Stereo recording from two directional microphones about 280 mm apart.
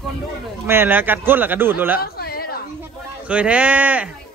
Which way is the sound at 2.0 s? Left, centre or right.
Left.